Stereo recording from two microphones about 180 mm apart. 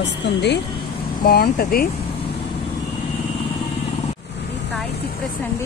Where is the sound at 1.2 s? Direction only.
55° left (ahead or behind).